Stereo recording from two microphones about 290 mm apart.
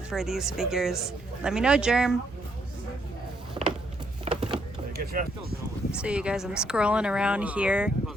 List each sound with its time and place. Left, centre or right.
0.1 s speech: centre
4.3 s a sound: right
4.9 s speech: right
5.9 s speech: centre